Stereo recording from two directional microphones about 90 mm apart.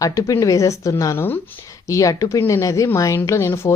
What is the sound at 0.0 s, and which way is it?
A woman's voice, 40° left (ahead or behind).